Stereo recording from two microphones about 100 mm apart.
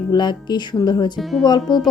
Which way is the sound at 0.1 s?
50° left (ahead or behind).